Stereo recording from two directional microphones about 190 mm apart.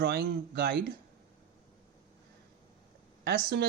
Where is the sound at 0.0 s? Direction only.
60° right (ahead or behind).